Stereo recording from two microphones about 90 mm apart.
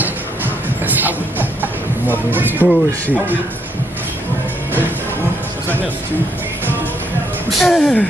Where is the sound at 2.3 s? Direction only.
20° right (ahead or behind).